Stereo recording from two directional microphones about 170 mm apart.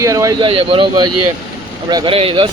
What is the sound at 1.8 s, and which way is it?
Speech, 25° right (ahead or behind).